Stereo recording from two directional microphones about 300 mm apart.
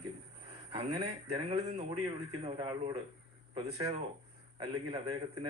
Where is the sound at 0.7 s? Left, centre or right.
Centre.